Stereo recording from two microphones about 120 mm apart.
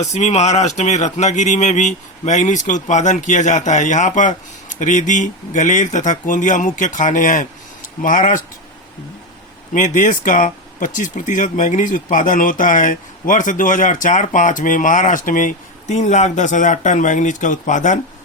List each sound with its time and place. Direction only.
0.1 s speech: 70° left (ahead or behind); by 8.4 s 90° left
9.7 s speech: 90° left